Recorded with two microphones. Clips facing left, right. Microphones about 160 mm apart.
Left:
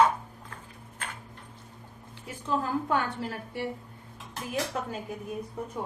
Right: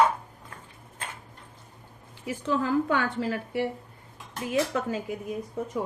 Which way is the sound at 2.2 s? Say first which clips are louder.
Right 4 dB; 90° right.